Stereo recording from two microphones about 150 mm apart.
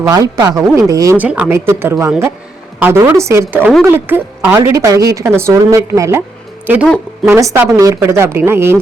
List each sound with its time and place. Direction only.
0.0 s a woman's voice: 25° right (ahead or behind)
1.1 s a woman's voice: 10° right (ahead or behind)
6.8 s a woman's voice: 5° left (ahead or behind)
7.3 s a woman's voice: 20° right (ahead or behind)